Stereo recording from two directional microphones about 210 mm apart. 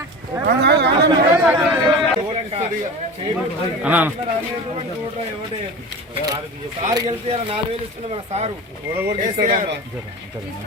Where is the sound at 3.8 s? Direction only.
5° right (ahead or behind).